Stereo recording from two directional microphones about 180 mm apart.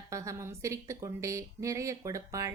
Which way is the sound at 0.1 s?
15° right (ahead or behind).